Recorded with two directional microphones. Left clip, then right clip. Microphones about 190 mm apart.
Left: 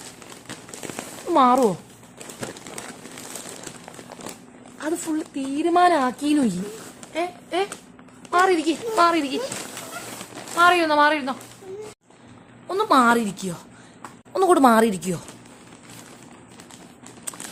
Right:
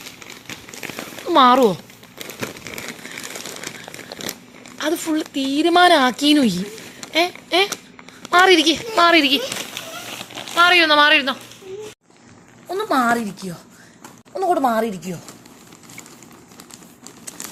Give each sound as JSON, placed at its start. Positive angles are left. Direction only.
{"t": 1.3, "sound": "speech", "side_deg": -5}
{"t": 4.8, "sound": "speech", "side_deg": -5}
{"t": 10.5, "sound": "speech", "side_deg": 0}
{"t": 12.6, "sound": "a sound", "side_deg": 10}
{"t": 14.3, "sound": "speech", "side_deg": 30}